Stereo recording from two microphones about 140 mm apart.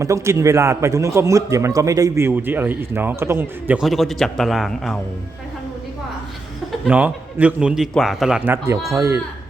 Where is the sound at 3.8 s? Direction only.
Centre (ahead or behind).